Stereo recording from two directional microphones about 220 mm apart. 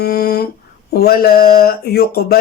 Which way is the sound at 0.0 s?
45° left (ahead or behind).